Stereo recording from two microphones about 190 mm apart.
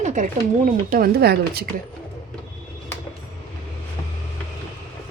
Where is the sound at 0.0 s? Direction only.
40° right (ahead or behind); by 1.6 s 55° right (ahead or behind).